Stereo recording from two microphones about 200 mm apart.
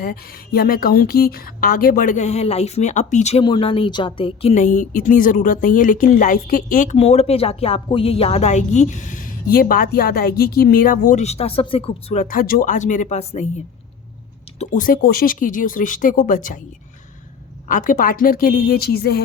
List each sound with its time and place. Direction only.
0.0 s speech: 50° left (ahead or behind)
14.6 s speech: 40° left (ahead or behind)
17.7 s a woman's voice: 40° left (ahead or behind)